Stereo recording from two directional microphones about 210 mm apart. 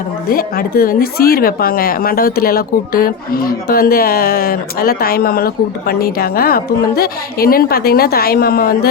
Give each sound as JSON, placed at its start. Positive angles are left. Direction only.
{"t": 0.3, "sound": "speech", "side_deg": 45}